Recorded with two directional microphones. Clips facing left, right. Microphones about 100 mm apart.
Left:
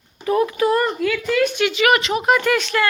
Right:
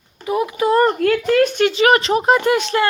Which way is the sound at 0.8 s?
50° right (ahead or behind).